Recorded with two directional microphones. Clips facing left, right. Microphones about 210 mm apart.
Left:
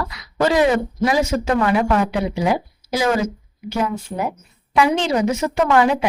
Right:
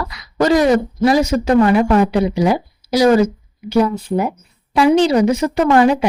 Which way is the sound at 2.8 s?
35° right (ahead or behind).